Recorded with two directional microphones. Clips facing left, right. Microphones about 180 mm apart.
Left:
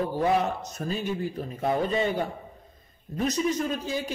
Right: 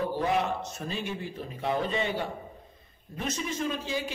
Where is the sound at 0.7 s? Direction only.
40° left (ahead or behind).